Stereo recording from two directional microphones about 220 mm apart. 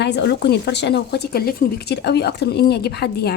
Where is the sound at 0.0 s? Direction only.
50° left (ahead or behind).